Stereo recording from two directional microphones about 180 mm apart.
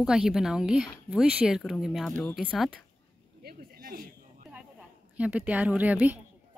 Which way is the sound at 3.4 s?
60° right (ahead or behind).